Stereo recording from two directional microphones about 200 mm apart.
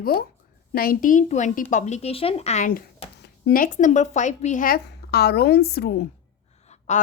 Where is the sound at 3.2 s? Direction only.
50° left (ahead or behind).